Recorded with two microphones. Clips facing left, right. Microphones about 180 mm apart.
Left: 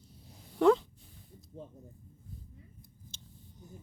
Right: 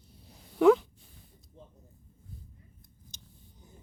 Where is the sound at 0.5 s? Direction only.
5° right (ahead or behind).